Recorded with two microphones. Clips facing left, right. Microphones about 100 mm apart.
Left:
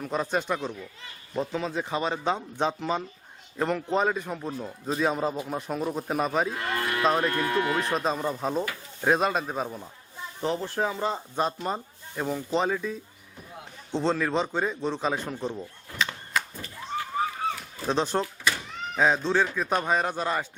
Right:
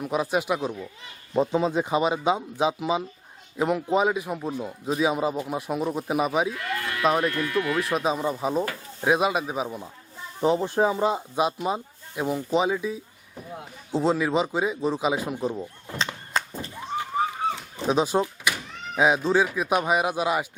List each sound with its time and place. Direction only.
0.0 s a man's voice: 10° right (ahead or behind)
6.5 s livestock: 35° left (ahead or behind)
7.2 s speech: 35° left (ahead or behind)
7.9 s a man's voice: 5° right (ahead or behind)
15.6 s a sound: 25° right (ahead or behind)
17.9 s speech: 10° right (ahead or behind)